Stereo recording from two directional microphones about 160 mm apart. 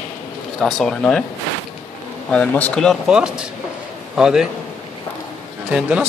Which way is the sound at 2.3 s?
10° left (ahead or behind).